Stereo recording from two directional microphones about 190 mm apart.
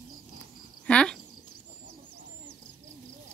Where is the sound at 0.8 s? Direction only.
5° left (ahead or behind).